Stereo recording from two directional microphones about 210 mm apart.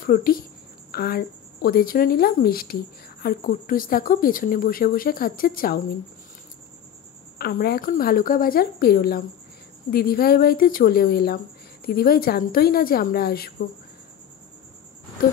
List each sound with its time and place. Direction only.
0.0 s speech: 40° left (ahead or behind)
7.3 s speech: 45° left (ahead or behind)